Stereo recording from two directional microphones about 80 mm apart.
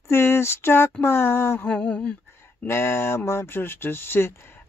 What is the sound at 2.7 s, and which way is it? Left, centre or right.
Speech, left.